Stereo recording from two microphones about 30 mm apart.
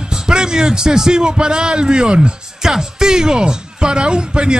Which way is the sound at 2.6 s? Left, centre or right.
Centre.